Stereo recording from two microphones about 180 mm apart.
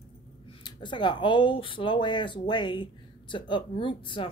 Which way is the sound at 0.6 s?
25° left (ahead or behind).